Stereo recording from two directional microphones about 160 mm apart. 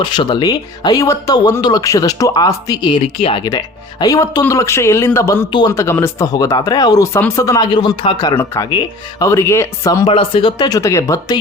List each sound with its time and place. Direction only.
0.0 s speech: 30° left (ahead or behind)
5.5 s speech: 30° left (ahead or behind)
5.7 s speech: 15° left (ahead or behind)
10.1 s speech: 35° left (ahead or behind)